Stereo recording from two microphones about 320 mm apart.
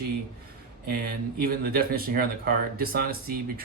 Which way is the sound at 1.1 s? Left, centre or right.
Right.